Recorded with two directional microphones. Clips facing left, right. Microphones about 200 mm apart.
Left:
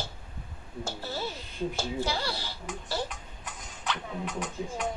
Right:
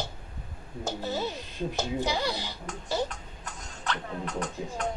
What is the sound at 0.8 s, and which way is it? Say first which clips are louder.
Speech: right 4 dB; 20° right (ahead or behind).